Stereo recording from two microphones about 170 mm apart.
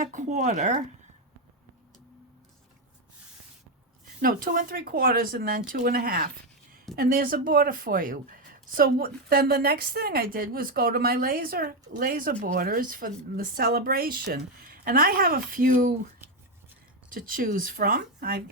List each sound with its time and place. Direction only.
0.0 s speech: 45° right (ahead or behind)
4.0 s a woman's voice: 55° right (ahead or behind)
17.2 s a woman's voice: 55° right (ahead or behind)